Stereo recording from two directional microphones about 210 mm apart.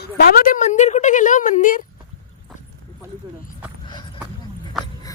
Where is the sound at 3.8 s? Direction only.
20° left (ahead or behind).